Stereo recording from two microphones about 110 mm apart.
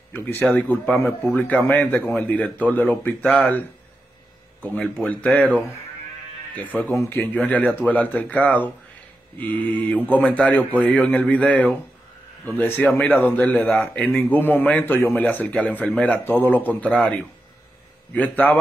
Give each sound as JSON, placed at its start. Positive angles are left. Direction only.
{"t": 0.1, "sound": "speech", "side_deg": 20}
{"t": 4.7, "sound": "speech", "side_deg": 10}
{"t": 18.1, "sound": "speech", "side_deg": 15}